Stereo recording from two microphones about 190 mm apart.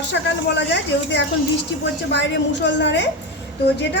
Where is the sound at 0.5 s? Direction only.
65° left (ahead or behind).